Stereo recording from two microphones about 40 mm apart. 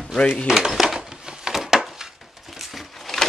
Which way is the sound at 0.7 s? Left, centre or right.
Centre.